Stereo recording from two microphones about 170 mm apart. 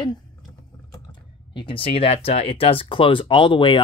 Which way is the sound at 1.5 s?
30° left (ahead or behind).